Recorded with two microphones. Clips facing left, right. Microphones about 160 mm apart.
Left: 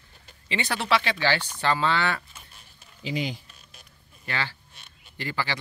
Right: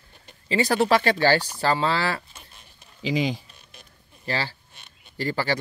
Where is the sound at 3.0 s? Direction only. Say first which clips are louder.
Right 5 dB; 90° right.